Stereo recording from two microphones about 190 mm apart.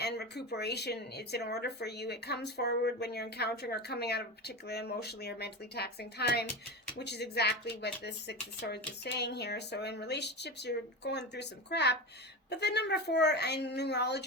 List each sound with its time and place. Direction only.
0.0 s speech: 60° left (ahead or behind)